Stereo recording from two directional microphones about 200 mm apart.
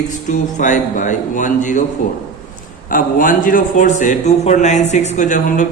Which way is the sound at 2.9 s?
45° left (ahead or behind).